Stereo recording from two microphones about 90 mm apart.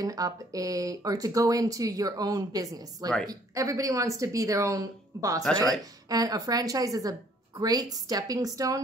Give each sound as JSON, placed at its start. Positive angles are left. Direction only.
{"t": 0.0, "sound": "a woman's voice", "side_deg": -40}